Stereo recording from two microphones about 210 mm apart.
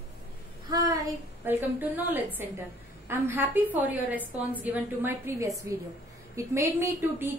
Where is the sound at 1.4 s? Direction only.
10° right (ahead or behind).